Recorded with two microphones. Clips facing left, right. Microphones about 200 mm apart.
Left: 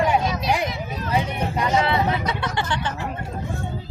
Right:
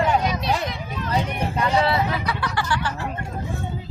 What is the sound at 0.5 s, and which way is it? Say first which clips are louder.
Speech: left 2 dB; 10° left (ahead or behind).